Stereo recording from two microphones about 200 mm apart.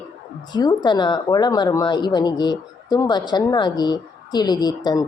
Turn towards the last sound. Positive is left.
turn(degrees=20)  # may be behind; listen again after turning